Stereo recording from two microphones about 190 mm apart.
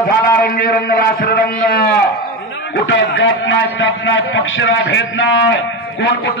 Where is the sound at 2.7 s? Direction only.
70° left (ahead or behind).